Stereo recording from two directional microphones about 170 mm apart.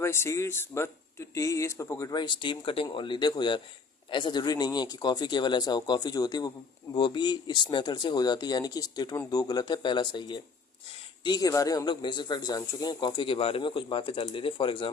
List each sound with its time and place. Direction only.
0.0 s a man's voice: 15° left (ahead or behind); by 14.8 s 30° left (ahead or behind)